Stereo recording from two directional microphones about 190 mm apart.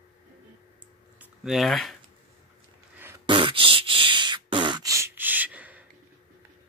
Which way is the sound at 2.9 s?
10° right (ahead or behind).